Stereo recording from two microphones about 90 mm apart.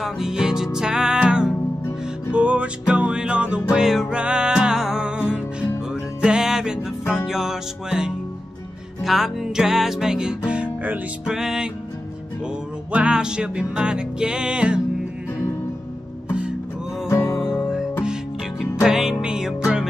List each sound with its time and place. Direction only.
0.0 s music: 5° right (ahead or behind)
12.9 s music: 10° right (ahead or behind)
17.1 s music: 30° left (ahead or behind)
18.6 s music: 5° right (ahead or behind)